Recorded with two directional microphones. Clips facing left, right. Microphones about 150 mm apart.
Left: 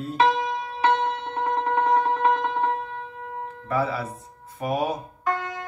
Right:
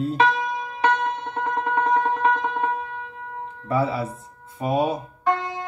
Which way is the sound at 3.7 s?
25° right (ahead or behind).